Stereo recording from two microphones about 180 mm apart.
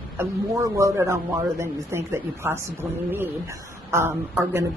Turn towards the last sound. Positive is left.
turn(degrees=-15)  # may be behind; listen again after turning